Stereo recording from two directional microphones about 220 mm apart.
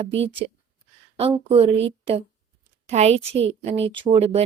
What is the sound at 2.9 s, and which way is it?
Speech, 30° right (ahead or behind).